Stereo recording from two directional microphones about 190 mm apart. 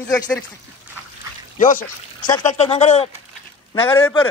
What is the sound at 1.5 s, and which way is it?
Speech, 45° left (ahead or behind).